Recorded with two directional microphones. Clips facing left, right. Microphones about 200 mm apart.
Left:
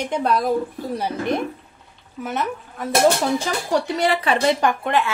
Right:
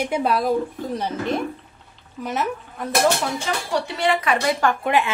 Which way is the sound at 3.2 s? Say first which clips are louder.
Left 4 dB; 35° left (ahead or behind).